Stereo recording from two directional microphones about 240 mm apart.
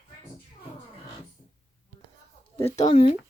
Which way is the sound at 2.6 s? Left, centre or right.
Left.